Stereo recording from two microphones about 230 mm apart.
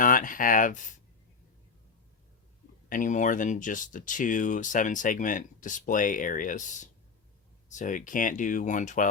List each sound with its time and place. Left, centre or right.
0.0 s speech: left
2.9 s speech: left